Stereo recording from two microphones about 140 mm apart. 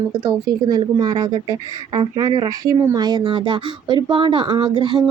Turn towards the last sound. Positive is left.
turn(degrees=-30)  # may be behind; listen again after turning